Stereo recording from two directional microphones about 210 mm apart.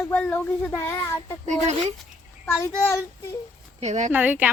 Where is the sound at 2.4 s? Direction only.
15° left (ahead or behind).